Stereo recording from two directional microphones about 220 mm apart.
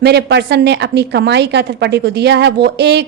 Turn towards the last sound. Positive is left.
turn(degrees=-50)  # may be behind; listen again after turning